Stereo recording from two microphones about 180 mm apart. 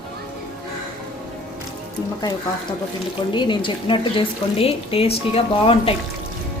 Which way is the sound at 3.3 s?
25° left (ahead or behind).